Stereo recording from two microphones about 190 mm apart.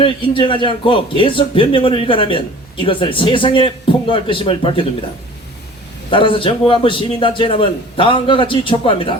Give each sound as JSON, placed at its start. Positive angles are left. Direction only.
{"t": 0.0, "sound": "a man's voice", "side_deg": 25}
{"t": 6.1, "sound": "a man's voice", "side_deg": 25}